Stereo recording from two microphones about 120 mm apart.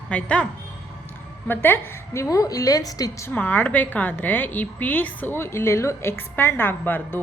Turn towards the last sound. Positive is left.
turn(degrees=15)  # may be behind; listen again after turning